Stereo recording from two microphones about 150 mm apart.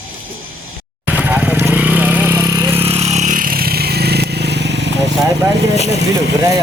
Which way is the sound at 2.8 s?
45° right (ahead or behind).